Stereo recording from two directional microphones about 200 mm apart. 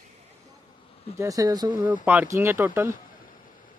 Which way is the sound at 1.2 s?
15° right (ahead or behind).